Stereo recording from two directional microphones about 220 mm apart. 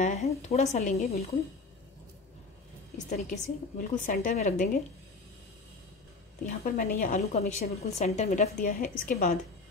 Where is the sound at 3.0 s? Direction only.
30° left (ahead or behind).